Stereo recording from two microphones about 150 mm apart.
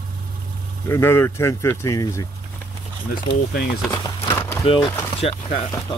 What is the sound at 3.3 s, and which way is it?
Speech, 70° left (ahead or behind).